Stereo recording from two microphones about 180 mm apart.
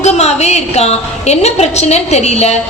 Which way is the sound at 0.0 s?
35° left (ahead or behind).